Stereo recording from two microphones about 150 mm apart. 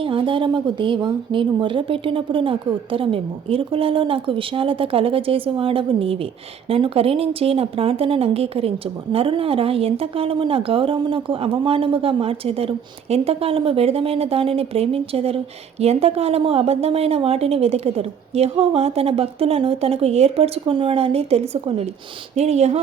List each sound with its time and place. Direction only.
0.0 s speech: 35° right (ahead or behind)